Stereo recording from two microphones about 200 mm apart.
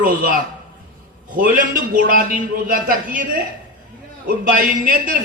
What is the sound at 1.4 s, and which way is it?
A man's voice, 45° right (ahead or behind).